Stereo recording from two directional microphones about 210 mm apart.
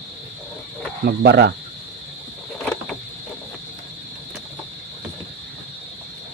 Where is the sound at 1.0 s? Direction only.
50° right (ahead or behind).